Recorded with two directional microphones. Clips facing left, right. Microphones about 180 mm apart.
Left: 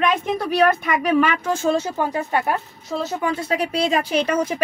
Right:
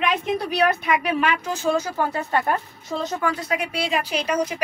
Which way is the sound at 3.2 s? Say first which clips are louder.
Left 2 dB; 25° left (ahead or behind).